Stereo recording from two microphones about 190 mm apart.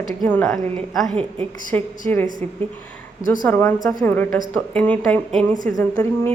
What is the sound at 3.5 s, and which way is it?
A woman's voice, 10° left (ahead or behind).